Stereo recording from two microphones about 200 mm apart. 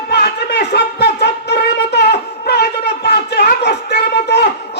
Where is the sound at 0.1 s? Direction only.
55° left (ahead or behind).